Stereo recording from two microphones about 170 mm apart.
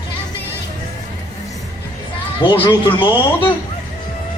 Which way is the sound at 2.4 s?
30° left (ahead or behind).